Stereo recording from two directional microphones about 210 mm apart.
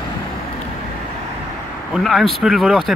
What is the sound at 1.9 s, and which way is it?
Speech, centre (ahead or behind).